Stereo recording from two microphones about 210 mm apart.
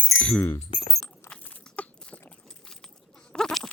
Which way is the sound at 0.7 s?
30° left (ahead or behind).